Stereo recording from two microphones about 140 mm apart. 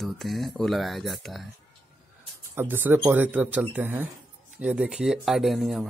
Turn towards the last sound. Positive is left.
turn(degrees=0)  # may be behind; listen again after turning